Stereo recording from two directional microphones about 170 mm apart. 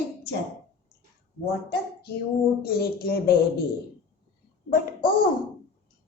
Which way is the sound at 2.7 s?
65° left (ahead or behind).